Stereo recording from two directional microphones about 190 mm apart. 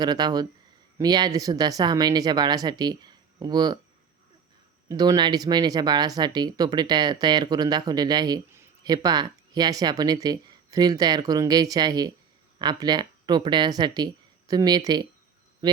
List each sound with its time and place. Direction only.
0.0 s speech: 20° right (ahead or behind)
4.9 s speech: 20° right (ahead or behind)